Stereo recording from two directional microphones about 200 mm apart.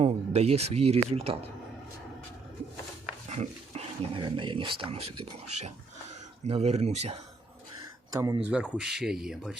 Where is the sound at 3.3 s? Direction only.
35° right (ahead or behind).